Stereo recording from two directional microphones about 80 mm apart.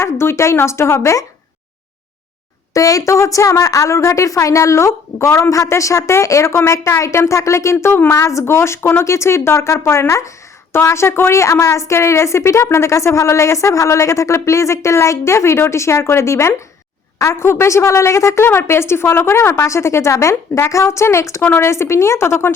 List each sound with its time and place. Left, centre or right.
0.0 s speech: left
2.7 s speech: left